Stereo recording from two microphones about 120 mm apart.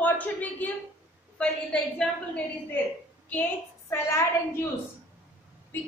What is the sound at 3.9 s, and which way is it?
Speech, 25° left (ahead or behind).